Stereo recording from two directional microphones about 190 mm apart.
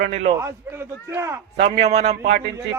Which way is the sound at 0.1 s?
35° right (ahead or behind).